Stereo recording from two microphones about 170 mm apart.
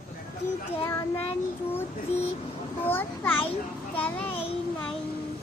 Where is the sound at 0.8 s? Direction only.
15° left (ahead or behind).